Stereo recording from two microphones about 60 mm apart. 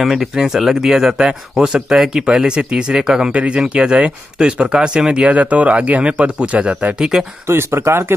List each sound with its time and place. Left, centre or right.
0.0 s speech: centre; by 7.0 s right
7.0 s speech: centre
7.4 s speech: right